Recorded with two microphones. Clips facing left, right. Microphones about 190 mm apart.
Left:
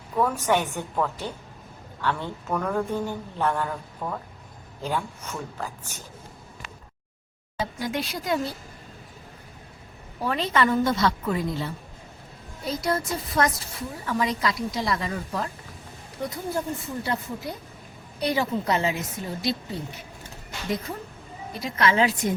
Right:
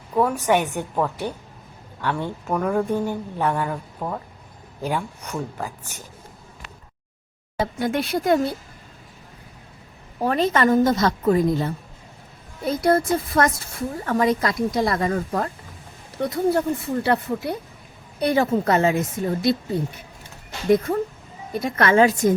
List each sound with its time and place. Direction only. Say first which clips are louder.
0.2 s speech: right 4 dB; 15° right (ahead or behind)
7.6 s speech: right 6 dB; 55° right (ahead or behind)
10.2 s a woman's voice: right 5 dB; 45° right (ahead or behind)
16.3 s speech: right 10 dB; 65° right (ahead or behind)
18.2 s a woman's voice: right 6 dB; 50° right (ahead or behind)
20.7 s a woman's voice: right 12 dB; 55° right (ahead or behind)